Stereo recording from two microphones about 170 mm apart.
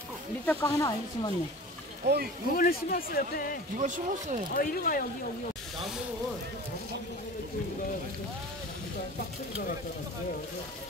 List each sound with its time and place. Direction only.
0.5 s speech: 15° left (ahead or behind)
2.0 s speech: 80° right
2.5 s speech: 55° left (ahead or behind)
3.7 s speech: 50° right (ahead or behind)
4.6 s speech: 55° left (ahead or behind)